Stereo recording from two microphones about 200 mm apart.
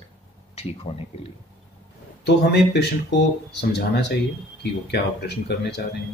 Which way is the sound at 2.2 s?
60° left (ahead or behind).